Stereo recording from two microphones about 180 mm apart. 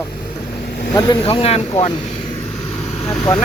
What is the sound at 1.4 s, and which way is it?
Speech, 35° left (ahead or behind).